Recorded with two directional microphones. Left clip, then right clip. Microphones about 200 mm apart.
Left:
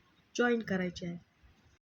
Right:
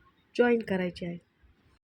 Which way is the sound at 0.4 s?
10° right (ahead or behind).